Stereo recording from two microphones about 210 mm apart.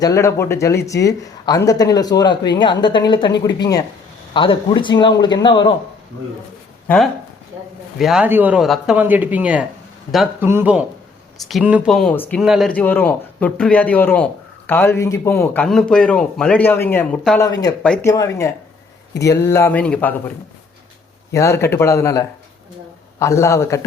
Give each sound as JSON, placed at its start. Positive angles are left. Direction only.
{"t": 0.0, "sound": "speech", "side_deg": 15}
{"t": 6.8, "sound": "speech", "side_deg": 0}
{"t": 18.0, "sound": "speech", "side_deg": 15}
{"t": 21.3, "sound": "speech", "side_deg": 15}